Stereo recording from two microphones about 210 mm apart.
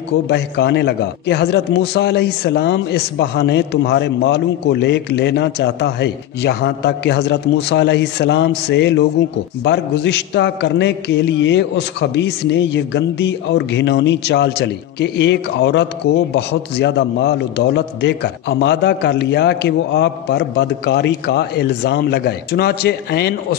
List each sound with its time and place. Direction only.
0.3 s a man's voice: 55° left (ahead or behind)